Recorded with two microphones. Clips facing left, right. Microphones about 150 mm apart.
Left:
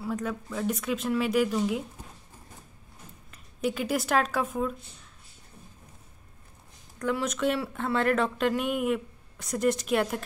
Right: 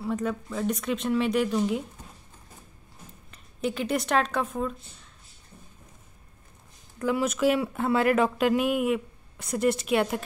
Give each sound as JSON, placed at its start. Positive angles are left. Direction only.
{"t": 0.0, "sound": "speech", "side_deg": 0}
{"t": 3.3, "sound": "speech", "side_deg": 0}
{"t": 7.0, "sound": "speech", "side_deg": -5}